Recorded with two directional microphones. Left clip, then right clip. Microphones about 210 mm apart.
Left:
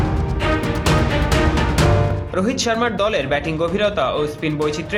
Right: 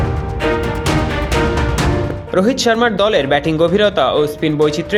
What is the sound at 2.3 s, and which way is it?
Speech, 30° right (ahead or behind).